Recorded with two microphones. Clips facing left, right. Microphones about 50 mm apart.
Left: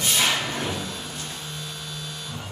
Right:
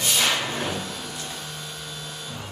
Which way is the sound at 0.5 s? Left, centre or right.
Right.